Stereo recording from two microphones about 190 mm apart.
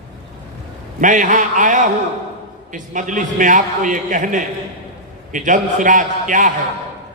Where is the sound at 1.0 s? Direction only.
40° right (ahead or behind).